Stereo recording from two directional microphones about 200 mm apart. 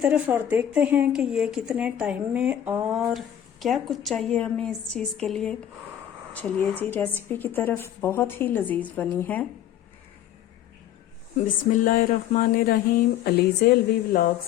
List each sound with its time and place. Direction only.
0.0 s a woman's voice: 10° right (ahead or behind); by 9.5 s 10° left (ahead or behind)
11.3 s speech: 40° left (ahead or behind)